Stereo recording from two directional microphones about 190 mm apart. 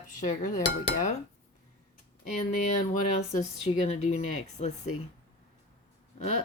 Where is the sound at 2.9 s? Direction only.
40° left (ahead or behind).